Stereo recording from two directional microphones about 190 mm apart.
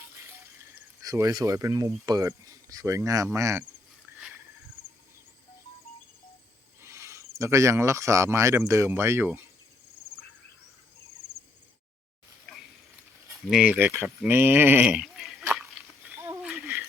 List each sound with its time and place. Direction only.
1.0 s speech: 15° right (ahead or behind)
6.8 s speech: 15° right (ahead or behind)
13.5 s speech: 5° right (ahead or behind)
16.1 s a sound: 15° right (ahead or behind)